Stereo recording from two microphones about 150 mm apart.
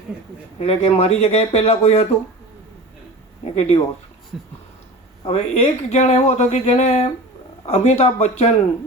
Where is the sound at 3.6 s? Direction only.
40° left (ahead or behind).